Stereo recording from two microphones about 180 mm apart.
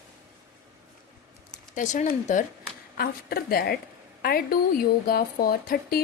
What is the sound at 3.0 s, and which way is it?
A woman's voice, 55° left (ahead or behind).